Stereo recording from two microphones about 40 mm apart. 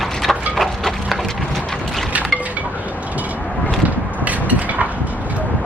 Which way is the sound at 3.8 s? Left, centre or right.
Right.